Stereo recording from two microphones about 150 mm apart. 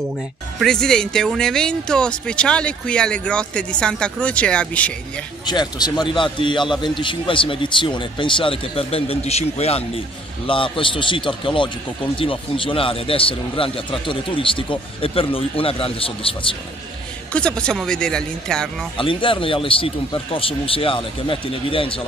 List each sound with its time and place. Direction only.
0.6 s speech: 5° left (ahead or behind)
5.4 s a man's voice: 30° left (ahead or behind)
17.3 s speech: 5° left (ahead or behind)
18.9 s speech: 35° left (ahead or behind)